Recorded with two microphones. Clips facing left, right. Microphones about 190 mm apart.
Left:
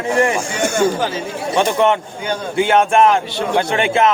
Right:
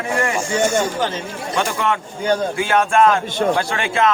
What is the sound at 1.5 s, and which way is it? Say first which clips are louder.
Music: left 6 dB; 25° left (ahead or behind).